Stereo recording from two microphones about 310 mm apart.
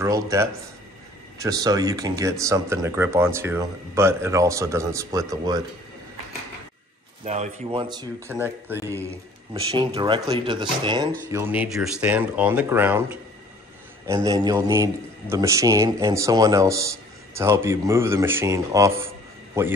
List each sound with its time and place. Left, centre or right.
0.0 s speech: centre
7.2 s speech: right
14.0 s speech: centre